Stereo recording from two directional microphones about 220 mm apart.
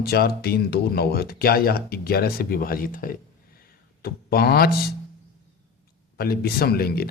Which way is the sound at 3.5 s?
45° left (ahead or behind).